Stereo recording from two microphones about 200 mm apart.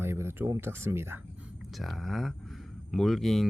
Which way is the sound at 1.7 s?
Centre (ahead or behind).